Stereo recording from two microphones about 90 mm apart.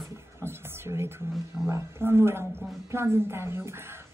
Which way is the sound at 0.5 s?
25° right (ahead or behind).